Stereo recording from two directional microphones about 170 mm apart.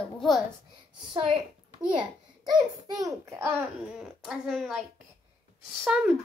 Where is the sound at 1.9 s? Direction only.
25° right (ahead or behind).